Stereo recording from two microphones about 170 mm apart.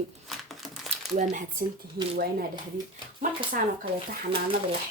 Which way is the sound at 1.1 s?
50° right (ahead or behind).